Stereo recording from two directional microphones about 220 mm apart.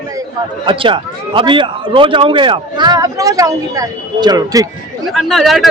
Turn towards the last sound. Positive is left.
turn(degrees=0)  # may be behind; listen again after turning